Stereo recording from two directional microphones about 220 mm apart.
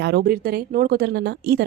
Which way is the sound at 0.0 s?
50° right (ahead or behind).